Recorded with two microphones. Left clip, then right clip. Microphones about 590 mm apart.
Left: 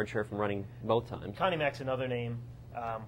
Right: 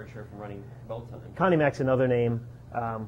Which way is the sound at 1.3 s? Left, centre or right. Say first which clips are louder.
Right 7 dB; right.